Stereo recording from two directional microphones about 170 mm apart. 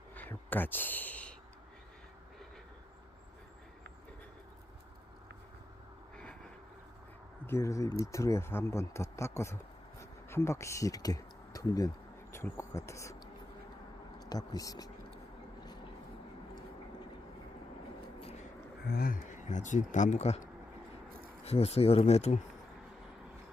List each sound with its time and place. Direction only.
0.1 s a sound: 10° left (ahead or behind)
7.4 s speech: 15° left (ahead or behind)
14.2 s speech: 20° left (ahead or behind)
18.9 s speech: 60° left (ahead or behind); by 22.4 s 40° left (ahead or behind)